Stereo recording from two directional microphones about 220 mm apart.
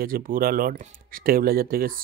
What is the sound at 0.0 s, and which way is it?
Speech, 40° right (ahead or behind).